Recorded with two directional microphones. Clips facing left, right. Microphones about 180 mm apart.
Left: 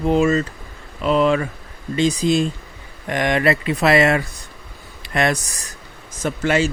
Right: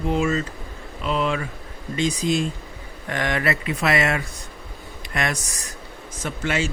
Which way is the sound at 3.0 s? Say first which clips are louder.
Left 6 dB; 20° left (ahead or behind).